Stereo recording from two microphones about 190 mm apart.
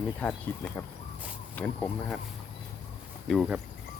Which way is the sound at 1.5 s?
10° left (ahead or behind).